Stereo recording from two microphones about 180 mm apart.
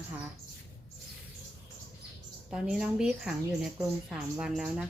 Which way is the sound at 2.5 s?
5° right (ahead or behind).